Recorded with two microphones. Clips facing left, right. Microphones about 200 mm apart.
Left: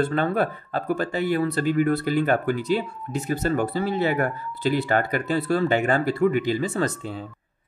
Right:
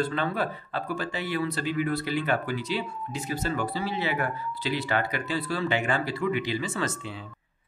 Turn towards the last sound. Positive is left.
turn(degrees=40)  # may be behind; listen again after turning